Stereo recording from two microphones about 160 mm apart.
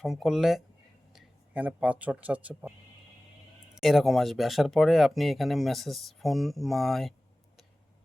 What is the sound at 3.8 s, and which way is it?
Speech, centre (ahead or behind).